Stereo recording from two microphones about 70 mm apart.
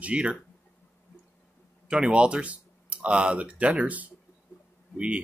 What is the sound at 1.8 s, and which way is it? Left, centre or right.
Speech, centre.